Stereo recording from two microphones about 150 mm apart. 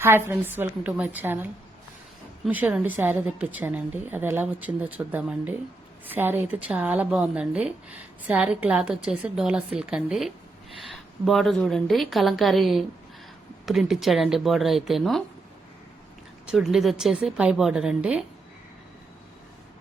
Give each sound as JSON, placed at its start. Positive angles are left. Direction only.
{"t": 0.0, "sound": "a woman's voice", "side_deg": -15}
{"t": 16.5, "sound": "a woman's voice", "side_deg": -5}